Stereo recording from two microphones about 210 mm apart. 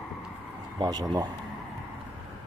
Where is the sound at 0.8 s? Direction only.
20° right (ahead or behind).